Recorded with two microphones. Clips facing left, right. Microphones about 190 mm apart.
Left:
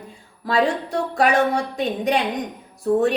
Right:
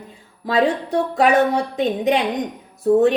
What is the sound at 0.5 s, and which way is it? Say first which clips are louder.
A woman's voice: right 2 dB; 20° right (ahead or behind).